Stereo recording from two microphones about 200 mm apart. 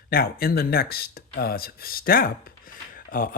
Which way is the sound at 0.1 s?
50° left (ahead or behind).